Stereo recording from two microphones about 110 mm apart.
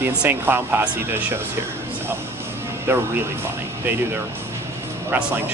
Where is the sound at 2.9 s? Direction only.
20° right (ahead or behind).